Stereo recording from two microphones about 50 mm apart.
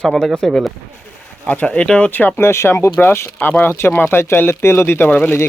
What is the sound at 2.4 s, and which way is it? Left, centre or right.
Speech, left.